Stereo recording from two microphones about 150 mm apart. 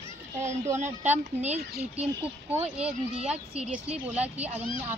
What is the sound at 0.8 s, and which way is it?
Speech, 50° right (ahead or behind).